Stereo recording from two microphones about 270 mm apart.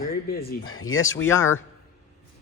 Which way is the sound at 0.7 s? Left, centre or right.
Left.